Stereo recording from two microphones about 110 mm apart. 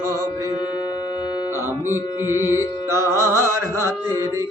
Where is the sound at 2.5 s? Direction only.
25° right (ahead or behind).